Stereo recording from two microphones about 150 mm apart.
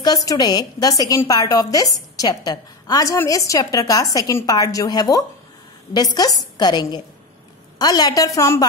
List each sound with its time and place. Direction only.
0.0 s a woman's voice: 25° left (ahead or behind)